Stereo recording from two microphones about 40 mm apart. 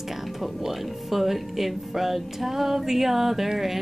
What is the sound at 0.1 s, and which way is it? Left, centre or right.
Speech, centre.